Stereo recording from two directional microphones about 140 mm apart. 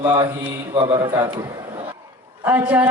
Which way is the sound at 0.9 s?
30° right (ahead or behind).